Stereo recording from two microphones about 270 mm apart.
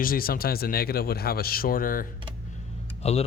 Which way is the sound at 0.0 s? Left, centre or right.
Left.